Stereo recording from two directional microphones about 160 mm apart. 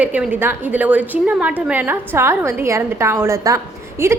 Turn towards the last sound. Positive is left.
turn(degrees=-20)  # may be behind; listen again after turning